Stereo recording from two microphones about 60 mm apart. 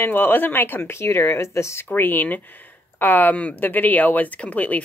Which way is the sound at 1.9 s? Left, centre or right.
Left.